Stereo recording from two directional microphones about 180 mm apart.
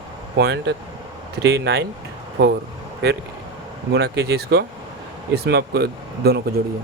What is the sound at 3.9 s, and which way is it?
Speech, 65° right (ahead or behind).